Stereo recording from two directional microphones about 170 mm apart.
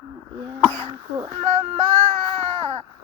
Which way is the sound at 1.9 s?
5° left (ahead or behind).